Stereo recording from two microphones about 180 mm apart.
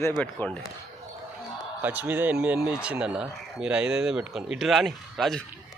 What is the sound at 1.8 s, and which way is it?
Speech, 10° right (ahead or behind).